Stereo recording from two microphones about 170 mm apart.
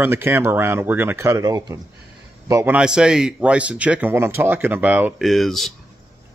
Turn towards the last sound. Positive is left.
turn(degrees=0)  # may be behind; listen again after turning